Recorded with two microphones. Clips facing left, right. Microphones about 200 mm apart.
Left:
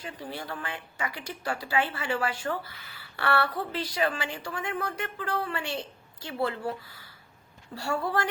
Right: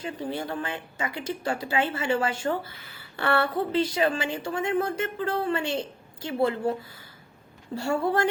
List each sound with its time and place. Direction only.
0.0 s a woman's voice: 25° right (ahead or behind)
7.8 s a woman's voice: 25° right (ahead or behind)